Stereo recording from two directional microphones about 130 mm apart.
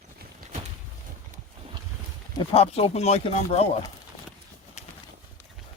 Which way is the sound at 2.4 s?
50° left (ahead or behind).